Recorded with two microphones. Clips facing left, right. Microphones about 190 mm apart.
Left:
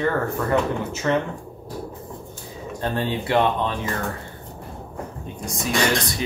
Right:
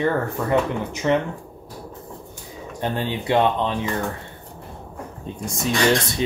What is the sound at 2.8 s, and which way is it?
Speech, 20° right (ahead or behind).